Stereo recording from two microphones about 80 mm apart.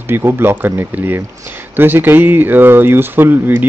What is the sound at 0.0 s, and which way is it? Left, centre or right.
Speech, right.